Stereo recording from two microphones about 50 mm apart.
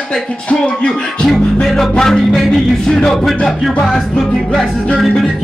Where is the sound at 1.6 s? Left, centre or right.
Centre.